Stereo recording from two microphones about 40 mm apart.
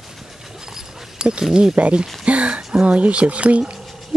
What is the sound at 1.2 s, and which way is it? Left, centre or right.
Speech, right.